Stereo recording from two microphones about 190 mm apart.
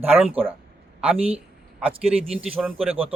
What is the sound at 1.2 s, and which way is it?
Speech, 30° right (ahead or behind).